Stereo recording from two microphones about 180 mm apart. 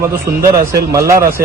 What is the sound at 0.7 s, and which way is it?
Speech, 15° right (ahead or behind).